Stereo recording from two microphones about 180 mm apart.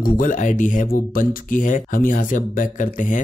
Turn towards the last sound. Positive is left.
turn(degrees=45)  # may be behind; listen again after turning